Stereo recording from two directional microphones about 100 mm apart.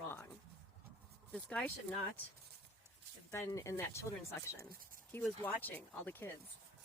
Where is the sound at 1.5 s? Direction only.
10° left (ahead or behind).